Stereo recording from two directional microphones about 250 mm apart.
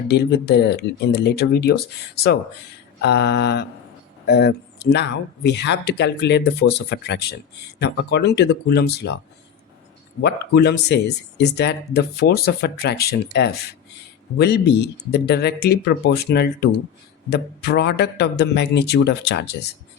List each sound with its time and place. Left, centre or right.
0.1 s speech: left
3.0 s speech: left
10.2 s speech: left